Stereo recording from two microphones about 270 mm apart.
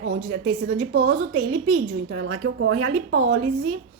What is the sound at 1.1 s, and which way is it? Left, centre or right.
A woman's voice, right.